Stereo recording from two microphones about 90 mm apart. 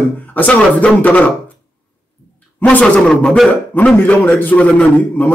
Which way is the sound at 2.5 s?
20° left (ahead or behind).